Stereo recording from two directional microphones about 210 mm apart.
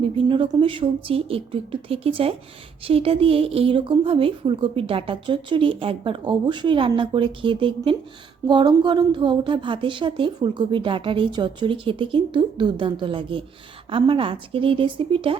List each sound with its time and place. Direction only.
0.0 s a woman's voice: 25° right (ahead or behind)